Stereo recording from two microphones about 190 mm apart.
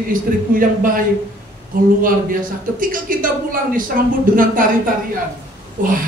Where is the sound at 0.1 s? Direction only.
45° right (ahead or behind).